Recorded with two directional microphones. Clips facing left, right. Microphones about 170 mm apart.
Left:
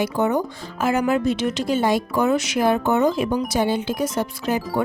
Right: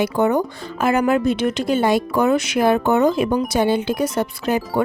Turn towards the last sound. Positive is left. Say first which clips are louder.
# right 3 dB
turn(degrees=-65)  # may be behind; listen again after turning